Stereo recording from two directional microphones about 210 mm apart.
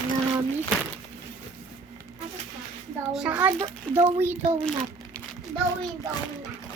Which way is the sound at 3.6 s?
30° right (ahead or behind).